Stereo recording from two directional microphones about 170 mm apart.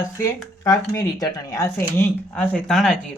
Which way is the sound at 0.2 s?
20° left (ahead or behind).